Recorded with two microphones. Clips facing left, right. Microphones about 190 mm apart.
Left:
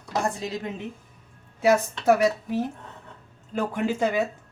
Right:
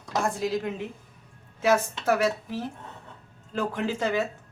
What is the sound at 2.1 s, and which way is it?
A woman's voice, 15° left (ahead or behind).